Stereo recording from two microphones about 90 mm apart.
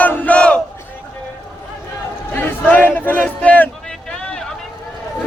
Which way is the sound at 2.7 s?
20° left (ahead or behind).